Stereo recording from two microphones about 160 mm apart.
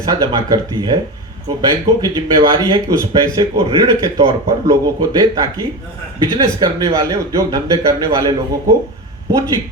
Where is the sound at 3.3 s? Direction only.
20° right (ahead or behind).